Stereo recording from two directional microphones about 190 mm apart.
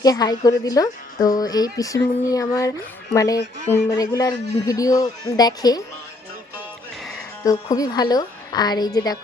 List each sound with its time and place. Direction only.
0.0 s speech: 20° left (ahead or behind)
7.4 s speech: 20° left (ahead or behind)